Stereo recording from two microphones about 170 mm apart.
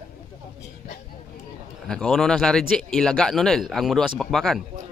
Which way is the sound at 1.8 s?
5° left (ahead or behind).